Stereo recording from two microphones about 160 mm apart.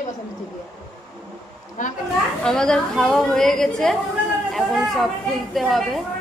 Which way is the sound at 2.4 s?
5° left (ahead or behind).